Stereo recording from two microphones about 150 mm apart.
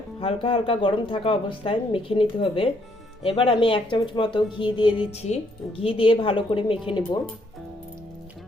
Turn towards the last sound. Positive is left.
turn(degrees=30)  # may be behind; listen again after turning